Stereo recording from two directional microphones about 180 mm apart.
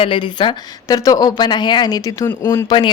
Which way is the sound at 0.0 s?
25° left (ahead or behind).